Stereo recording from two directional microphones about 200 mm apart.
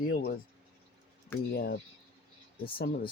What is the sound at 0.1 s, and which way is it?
Speech, 50° left (ahead or behind).